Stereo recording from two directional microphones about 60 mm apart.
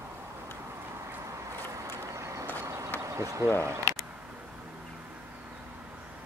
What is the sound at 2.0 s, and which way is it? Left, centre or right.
Vehicle, right.